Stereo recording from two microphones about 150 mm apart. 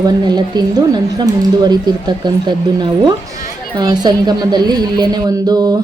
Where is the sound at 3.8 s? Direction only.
25° right (ahead or behind).